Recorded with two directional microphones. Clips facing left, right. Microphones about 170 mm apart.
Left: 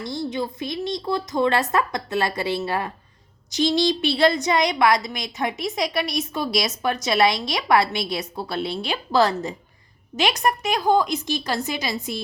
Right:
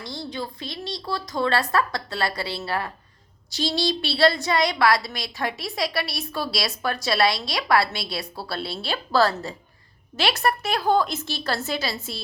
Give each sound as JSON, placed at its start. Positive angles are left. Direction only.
{"t": 0.1, "sound": "a woman's voice", "side_deg": 20}